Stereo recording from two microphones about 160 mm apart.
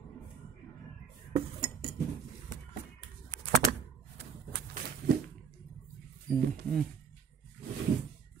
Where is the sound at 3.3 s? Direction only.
65° right (ahead or behind).